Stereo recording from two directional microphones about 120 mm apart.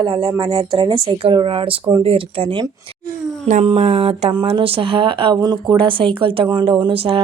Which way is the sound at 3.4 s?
90° right.